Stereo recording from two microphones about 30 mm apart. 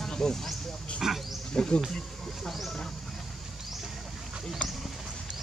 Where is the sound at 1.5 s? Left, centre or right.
Left.